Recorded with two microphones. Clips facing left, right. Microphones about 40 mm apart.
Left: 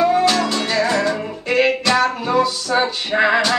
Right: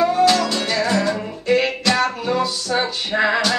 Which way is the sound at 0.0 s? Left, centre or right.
Centre.